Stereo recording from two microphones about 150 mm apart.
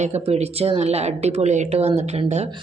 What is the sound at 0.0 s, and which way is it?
A woman's voice, 45° right (ahead or behind).